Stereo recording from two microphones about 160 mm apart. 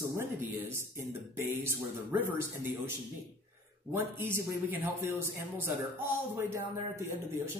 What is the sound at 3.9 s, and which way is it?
Speech, 15° right (ahead or behind).